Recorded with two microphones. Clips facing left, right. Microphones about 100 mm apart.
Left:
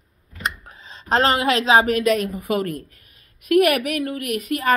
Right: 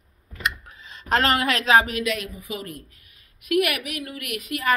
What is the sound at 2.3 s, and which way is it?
A woman's voice, 60° left (ahead or behind).